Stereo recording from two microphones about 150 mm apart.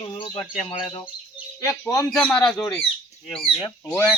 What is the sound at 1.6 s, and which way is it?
Speech, 20° left (ahead or behind).